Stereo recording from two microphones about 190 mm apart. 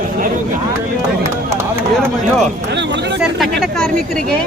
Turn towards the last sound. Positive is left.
turn(degrees=0)  # may be behind; listen again after turning